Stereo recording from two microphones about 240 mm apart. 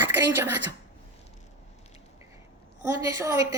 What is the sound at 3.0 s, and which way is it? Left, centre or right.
Speech, centre.